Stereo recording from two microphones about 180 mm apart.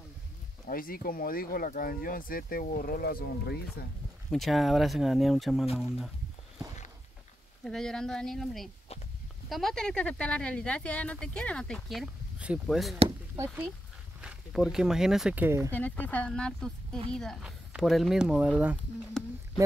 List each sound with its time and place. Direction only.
0.7 s speech: 55° left (ahead or behind)
4.3 s speech: centre (ahead or behind)
7.6 s speech: 5° left (ahead or behind)
14.2 s speech: centre (ahead or behind)
15.7 s speech: 10° left (ahead or behind)